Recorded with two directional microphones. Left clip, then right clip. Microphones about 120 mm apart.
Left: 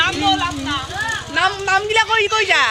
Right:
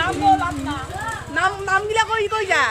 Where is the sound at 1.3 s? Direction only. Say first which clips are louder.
Left 2 dB; 25° left (ahead or behind).